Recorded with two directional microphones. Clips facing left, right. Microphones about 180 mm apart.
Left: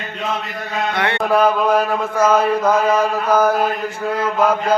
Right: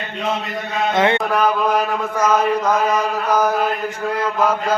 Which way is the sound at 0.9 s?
20° right (ahead or behind).